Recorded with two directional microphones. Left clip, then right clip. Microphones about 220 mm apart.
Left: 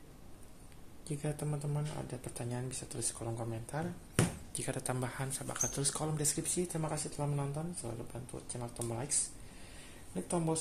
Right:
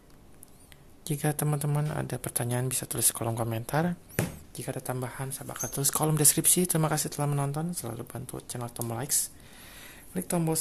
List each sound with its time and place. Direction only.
1.0 s speech: 40° right (ahead or behind)
4.6 s speech: 20° right (ahead or behind)
5.7 s speech: 30° right (ahead or behind)
10.1 s speech: 35° right (ahead or behind)